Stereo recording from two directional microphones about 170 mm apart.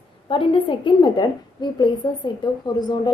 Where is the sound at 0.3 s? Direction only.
30° left (ahead or behind).